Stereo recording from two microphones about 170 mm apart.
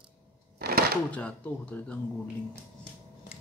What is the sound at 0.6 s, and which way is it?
Chopping, 60° right (ahead or behind).